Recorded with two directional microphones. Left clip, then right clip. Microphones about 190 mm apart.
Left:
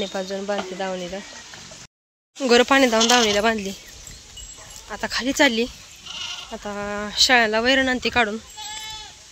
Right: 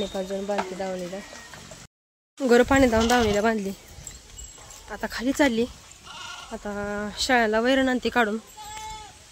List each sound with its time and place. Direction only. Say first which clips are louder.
0.0 s speech: left 2 dB; centre (ahead or behind)
2.4 s speech: left 3 dB; 5° right (ahead or behind)
4.8 s speech: left 4 dB; 5° right (ahead or behind)